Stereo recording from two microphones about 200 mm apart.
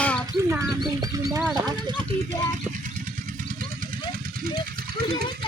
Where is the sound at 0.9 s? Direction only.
20° right (ahead or behind).